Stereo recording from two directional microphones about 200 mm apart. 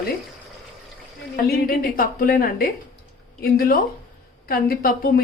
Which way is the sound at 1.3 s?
50° left (ahead or behind).